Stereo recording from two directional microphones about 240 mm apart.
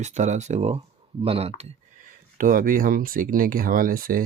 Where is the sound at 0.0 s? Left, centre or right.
Right.